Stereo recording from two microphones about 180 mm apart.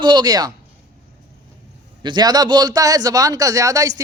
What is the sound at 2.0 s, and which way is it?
Speech, 25° right (ahead or behind).